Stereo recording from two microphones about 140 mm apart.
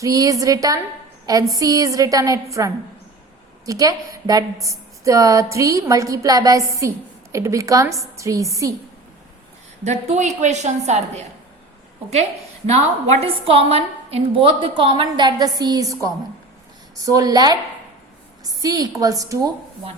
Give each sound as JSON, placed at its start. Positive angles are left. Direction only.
{"t": 0.0, "sound": "a woman's voice", "side_deg": -25}
{"t": 9.8, "sound": "a woman's voice", "side_deg": -55}
{"t": 12.6, "sound": "a woman's voice", "side_deg": -50}